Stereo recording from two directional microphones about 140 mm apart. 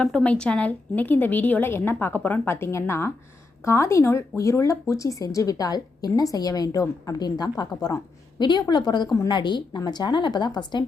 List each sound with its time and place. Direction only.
0.0 s a woman's voice: 5° left (ahead or behind); by 10.8 s 30° left (ahead or behind)